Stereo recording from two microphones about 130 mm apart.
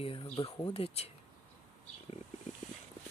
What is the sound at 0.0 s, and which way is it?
Speech, 45° left (ahead or behind).